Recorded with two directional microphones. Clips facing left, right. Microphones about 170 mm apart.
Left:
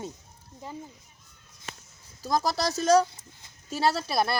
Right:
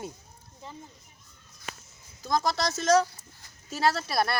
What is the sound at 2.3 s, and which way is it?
Speech, 5° left (ahead or behind).